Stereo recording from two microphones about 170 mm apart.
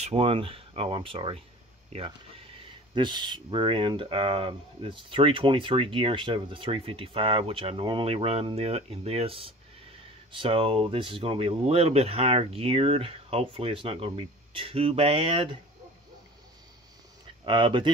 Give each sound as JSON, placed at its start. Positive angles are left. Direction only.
{"t": 0.0, "sound": "speech", "side_deg": -35}
{"t": 17.5, "sound": "speech", "side_deg": -30}